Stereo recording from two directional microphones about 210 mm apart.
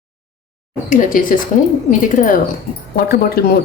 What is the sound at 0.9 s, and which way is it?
Speech, 40° left (ahead or behind).